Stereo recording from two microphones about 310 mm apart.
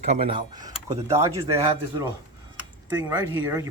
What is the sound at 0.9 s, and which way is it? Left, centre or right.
Speech, centre.